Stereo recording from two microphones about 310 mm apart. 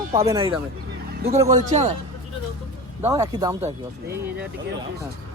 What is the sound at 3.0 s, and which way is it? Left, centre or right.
Speech, centre.